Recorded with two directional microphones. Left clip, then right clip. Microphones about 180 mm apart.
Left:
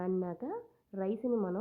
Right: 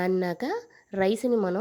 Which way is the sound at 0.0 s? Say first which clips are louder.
Right 9 dB; 40° right (ahead or behind).